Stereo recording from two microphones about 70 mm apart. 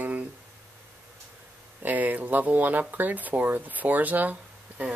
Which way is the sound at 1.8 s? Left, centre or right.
Right.